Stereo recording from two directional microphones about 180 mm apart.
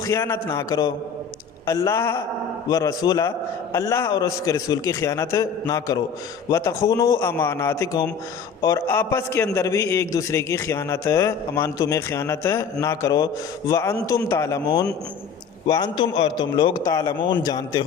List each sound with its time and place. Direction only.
0.0 s a man's voice: 15° left (ahead or behind)